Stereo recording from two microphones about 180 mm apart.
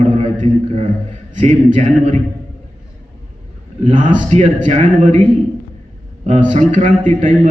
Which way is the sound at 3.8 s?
45° right (ahead or behind).